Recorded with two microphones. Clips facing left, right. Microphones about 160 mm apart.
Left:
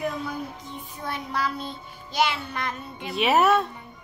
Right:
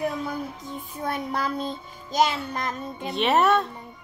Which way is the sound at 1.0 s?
50° right (ahead or behind).